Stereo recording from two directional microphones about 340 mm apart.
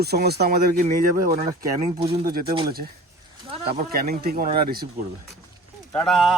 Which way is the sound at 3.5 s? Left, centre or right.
Centre.